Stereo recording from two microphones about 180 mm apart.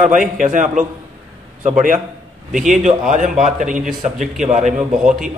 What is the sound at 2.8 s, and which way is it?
Speech, 45° right (ahead or behind).